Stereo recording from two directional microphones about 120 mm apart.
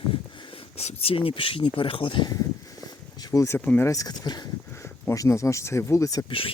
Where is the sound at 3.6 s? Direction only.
15° left (ahead or behind).